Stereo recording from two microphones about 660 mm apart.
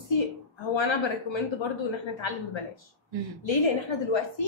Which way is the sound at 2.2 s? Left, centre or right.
Left.